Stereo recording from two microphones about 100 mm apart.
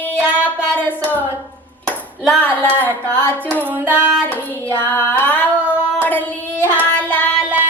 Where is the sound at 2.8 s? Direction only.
20° left (ahead or behind).